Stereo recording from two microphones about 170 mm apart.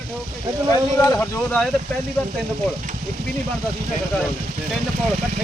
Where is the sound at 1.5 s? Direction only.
5° left (ahead or behind).